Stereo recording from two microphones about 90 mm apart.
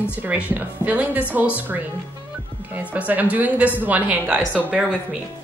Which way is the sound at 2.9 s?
20° right (ahead or behind).